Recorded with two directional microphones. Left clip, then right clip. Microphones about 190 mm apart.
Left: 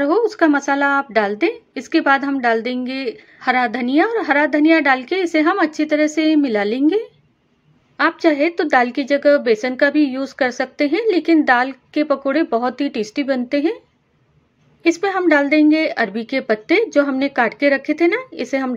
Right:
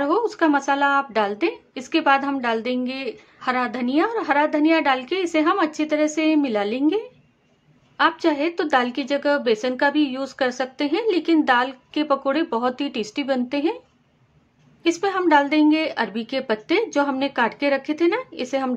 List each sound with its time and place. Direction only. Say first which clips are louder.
0.0 s a woman's voice: left 5 dB; 15° left (ahead or behind)
14.8 s a woman's voice: left 4 dB; 15° left (ahead or behind)